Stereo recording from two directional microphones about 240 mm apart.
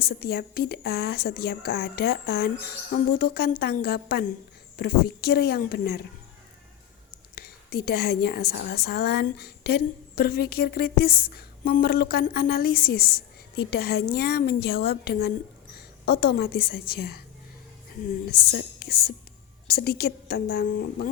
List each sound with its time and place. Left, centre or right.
0.0 s a woman's voice: left
7.3 s a woman's voice: left